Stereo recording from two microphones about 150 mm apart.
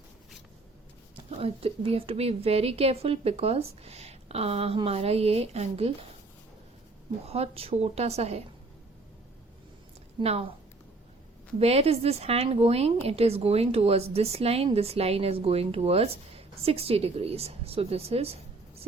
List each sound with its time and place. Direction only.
1.1 s a woman's voice: 40° right (ahead or behind)
7.3 s a woman's voice: 45° right (ahead or behind)
10.2 s a woman's voice: 40° right (ahead or behind)
11.6 s a woman's voice: 40° right (ahead or behind)